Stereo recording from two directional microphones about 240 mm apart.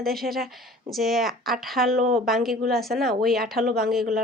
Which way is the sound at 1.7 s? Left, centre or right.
Right.